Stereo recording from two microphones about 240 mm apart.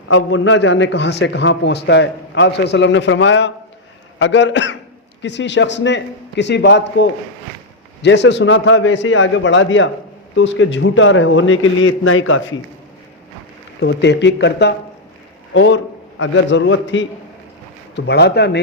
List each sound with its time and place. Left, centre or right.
0.1 s a man's voice: left
13.7 s a man's voice: left